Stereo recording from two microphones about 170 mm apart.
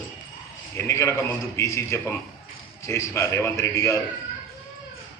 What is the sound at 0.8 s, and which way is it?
A man's voice, 15° left (ahead or behind).